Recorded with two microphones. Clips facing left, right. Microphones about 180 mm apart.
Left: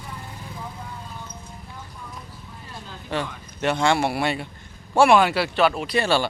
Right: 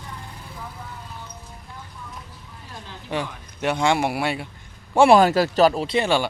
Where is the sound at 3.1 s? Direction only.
10° right (ahead or behind).